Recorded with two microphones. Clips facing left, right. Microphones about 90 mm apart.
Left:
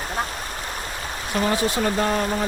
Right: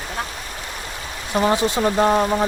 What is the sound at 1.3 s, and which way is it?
Speech, 30° right (ahead or behind).